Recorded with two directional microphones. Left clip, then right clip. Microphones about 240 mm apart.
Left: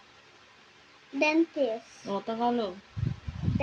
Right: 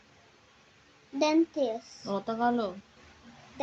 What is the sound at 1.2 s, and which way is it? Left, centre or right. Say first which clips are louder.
Speech: left 1 dB; centre.